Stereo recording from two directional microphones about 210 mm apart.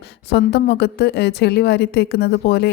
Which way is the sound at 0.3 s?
50° left (ahead or behind).